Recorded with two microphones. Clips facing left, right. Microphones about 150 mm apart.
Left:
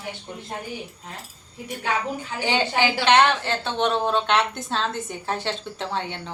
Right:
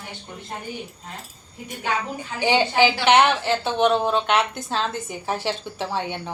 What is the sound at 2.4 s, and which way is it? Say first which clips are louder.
A woman's voice: right 4 dB; 15° right (ahead or behind).